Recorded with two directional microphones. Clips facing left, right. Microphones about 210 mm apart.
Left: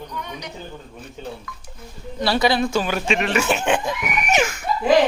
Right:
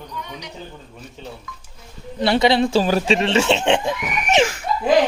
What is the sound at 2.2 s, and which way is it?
Speech, 25° right (ahead or behind).